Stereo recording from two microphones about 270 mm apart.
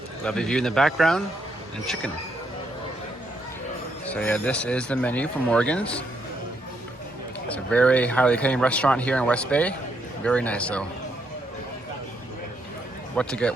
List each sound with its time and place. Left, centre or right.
0.3 s speech: centre
4.0 s speech: centre
7.4 s speech: centre
13.1 s speech: centre